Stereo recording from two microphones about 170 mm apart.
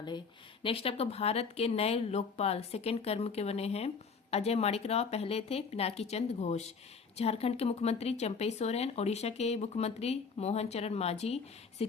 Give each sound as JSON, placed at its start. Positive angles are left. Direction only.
{"t": 0.6, "sound": "speech", "side_deg": 35}